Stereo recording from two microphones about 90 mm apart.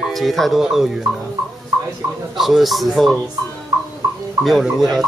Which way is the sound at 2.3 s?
5° right (ahead or behind).